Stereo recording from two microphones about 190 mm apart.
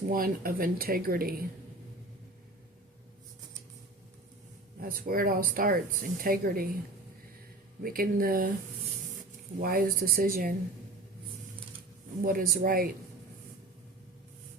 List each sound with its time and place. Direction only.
0.1 s speech: 50° right (ahead or behind)
4.8 s speech: 50° right (ahead or behind)
7.8 s speech: 50° right (ahead or behind)
9.6 s speech: 50° right (ahead or behind)
12.2 s speech: 50° right (ahead or behind)